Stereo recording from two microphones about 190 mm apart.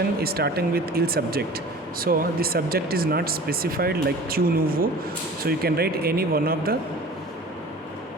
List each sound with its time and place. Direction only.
0.2 s speech: 55° right (ahead or behind)